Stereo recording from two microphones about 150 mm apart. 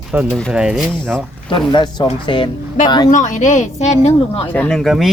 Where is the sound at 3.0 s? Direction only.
55° left (ahead or behind).